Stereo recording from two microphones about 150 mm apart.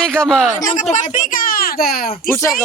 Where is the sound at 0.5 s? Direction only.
60° left (ahead or behind); by 2.1 s 85° left.